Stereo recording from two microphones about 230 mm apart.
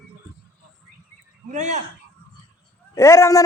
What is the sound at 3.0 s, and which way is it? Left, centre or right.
Speech, centre.